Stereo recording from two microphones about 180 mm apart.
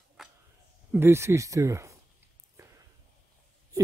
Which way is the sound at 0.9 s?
15° right (ahead or behind).